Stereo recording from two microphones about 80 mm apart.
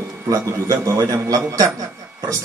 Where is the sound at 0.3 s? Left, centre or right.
Right.